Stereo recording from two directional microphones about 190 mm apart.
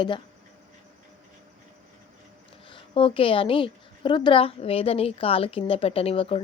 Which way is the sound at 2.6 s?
25° left (ahead or behind).